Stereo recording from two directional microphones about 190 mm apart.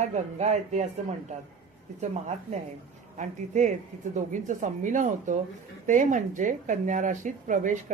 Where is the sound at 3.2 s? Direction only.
40° right (ahead or behind).